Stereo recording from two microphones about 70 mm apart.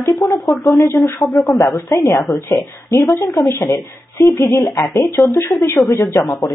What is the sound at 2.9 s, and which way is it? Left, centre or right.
Speech, left.